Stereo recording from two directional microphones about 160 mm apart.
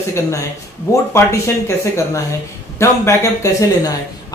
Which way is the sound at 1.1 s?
15° left (ahead or behind).